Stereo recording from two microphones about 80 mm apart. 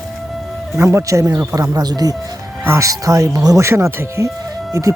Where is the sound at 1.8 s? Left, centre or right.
Right.